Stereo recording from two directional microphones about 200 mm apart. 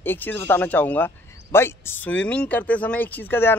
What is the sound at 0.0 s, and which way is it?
Speech, 10° left (ahead or behind).